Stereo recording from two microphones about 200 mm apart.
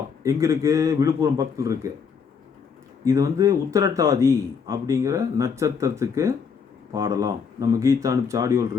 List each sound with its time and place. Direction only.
0.2 s a man's voice: 15° right (ahead or behind)
3.0 s a man's voice: 15° right (ahead or behind)